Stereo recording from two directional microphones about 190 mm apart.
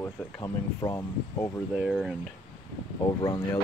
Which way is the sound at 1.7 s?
Centre (ahead or behind).